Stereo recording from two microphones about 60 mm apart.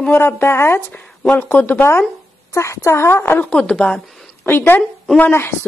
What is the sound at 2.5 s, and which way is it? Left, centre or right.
Speech, left.